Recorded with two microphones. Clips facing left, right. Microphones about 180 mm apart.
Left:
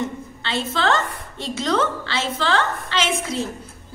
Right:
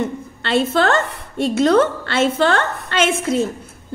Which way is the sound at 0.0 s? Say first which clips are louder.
Right 4 dB; 60° right (ahead or behind).